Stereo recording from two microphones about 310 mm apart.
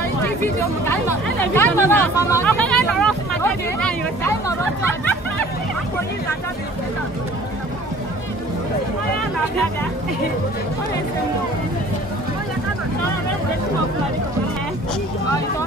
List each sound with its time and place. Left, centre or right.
0.2 s speech: centre